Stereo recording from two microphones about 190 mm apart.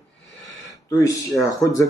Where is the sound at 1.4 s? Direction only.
15° left (ahead or behind).